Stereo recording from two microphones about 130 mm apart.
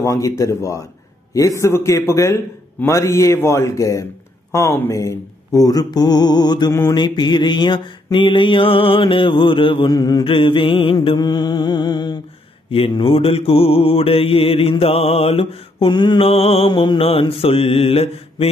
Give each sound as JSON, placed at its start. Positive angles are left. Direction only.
{"t": 0.0, "sound": "a man's voice", "side_deg": 25}
{"t": 6.7, "sound": "a man's voice", "side_deg": 25}
{"t": 7.0, "sound": "mantra", "side_deg": 35}
{"t": 9.8, "sound": "a man's voice", "side_deg": 30}
{"t": 10.2, "sound": "mantra", "side_deg": 45}
{"t": 11.0, "sound": "mantra", "side_deg": 35}
{"t": 12.7, "sound": "mantra", "side_deg": 45}
{"t": 15.9, "sound": "mantra", "side_deg": 35}
{"t": 16.2, "sound": "mantra", "side_deg": 50}